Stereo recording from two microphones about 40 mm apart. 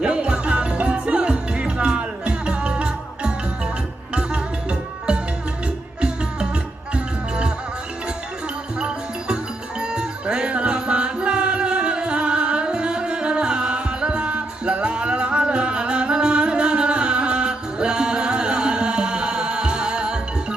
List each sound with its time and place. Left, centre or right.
0.0 s music: right
6.9 s music: right
8.8 s music: centre